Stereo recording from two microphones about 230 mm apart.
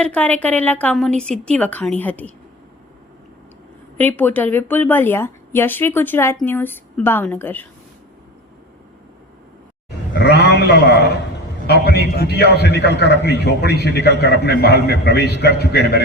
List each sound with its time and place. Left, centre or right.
0.0 s a woman's voice: centre
3.9 s a woman's voice: centre
10.4 s a man's voice: left